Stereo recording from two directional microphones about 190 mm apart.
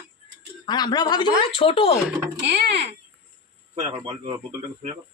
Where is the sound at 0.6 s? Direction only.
20° left (ahead or behind).